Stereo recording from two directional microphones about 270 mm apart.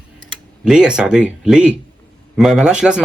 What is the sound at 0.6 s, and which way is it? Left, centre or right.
A man's voice, centre.